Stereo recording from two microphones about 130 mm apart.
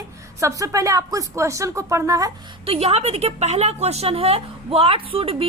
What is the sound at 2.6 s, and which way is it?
A woman's voice, 50° right (ahead or behind).